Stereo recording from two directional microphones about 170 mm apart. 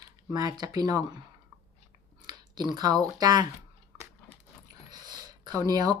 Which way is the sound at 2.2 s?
25° right (ahead or behind).